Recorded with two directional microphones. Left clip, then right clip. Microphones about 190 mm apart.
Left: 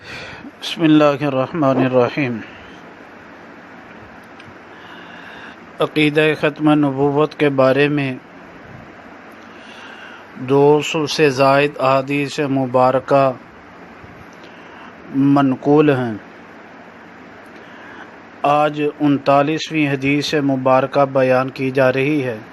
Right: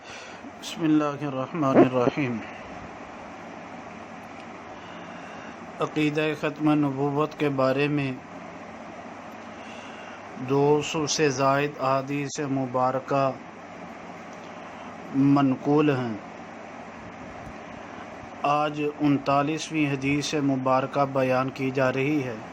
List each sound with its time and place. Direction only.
0.1 s a man's voice: 35° left (ahead or behind)
5.8 s speech: 35° left (ahead or behind)
10.4 s speech: 35° left (ahead or behind)
15.2 s speech: 25° left (ahead or behind)
18.4 s speech: 30° left (ahead or behind)